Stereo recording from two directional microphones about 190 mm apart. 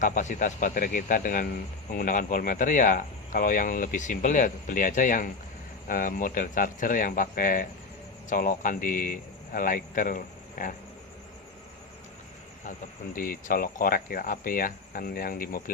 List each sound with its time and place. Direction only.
0.0 s speech: 40° left (ahead or behind)
13.1 s speech: 50° left (ahead or behind)